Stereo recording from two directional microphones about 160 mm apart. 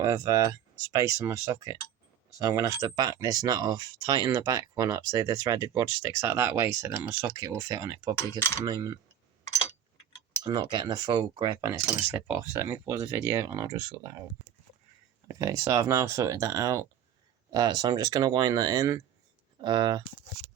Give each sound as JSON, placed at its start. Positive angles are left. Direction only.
{"t": 0.0, "sound": "speech", "side_deg": -25}
{"t": 10.4, "sound": "speech", "side_deg": -25}
{"t": 15.3, "sound": "speech", "side_deg": -20}